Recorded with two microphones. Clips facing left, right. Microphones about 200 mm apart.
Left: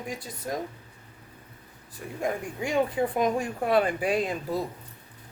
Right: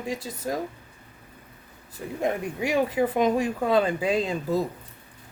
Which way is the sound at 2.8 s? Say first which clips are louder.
Right 1 dB; 90° right.